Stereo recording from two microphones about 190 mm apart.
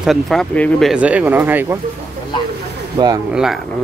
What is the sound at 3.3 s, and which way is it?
Speech, centre (ahead or behind).